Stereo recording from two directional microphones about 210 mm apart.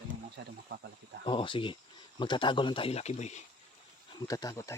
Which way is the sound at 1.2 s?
25° left (ahead or behind).